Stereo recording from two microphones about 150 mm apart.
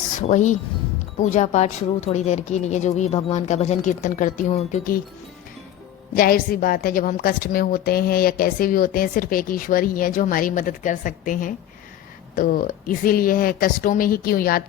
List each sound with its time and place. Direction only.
0.2 s a woman's voice: 55° left (ahead or behind)
6.1 s a woman's voice: 75° left (ahead or behind)